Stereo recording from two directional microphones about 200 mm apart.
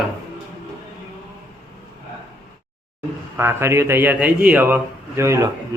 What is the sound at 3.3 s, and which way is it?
A man's voice, 10° right (ahead or behind).